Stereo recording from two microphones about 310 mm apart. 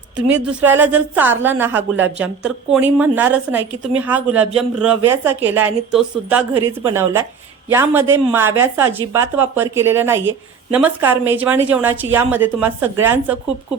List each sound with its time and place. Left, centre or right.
0.3 s a woman's voice: centre